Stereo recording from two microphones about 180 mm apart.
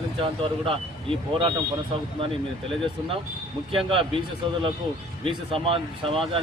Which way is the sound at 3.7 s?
30° right (ahead or behind).